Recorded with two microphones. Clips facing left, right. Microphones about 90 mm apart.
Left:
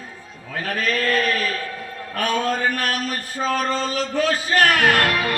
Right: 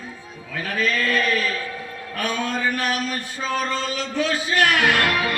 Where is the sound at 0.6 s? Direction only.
45° left (ahead or behind).